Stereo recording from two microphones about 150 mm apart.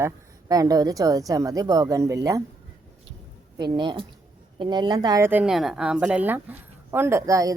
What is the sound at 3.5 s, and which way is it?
A woman's voice, 30° right (ahead or behind).